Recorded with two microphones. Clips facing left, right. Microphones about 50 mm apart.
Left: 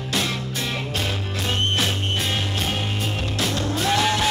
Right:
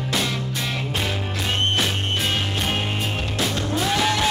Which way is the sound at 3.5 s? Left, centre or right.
Centre.